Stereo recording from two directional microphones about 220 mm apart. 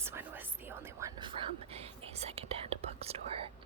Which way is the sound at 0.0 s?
10° right (ahead or behind).